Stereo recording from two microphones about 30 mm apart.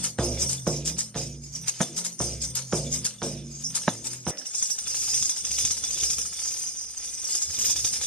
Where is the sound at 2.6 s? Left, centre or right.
Centre.